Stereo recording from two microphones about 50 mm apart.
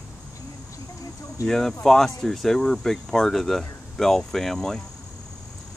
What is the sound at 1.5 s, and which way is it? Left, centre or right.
Speech, centre.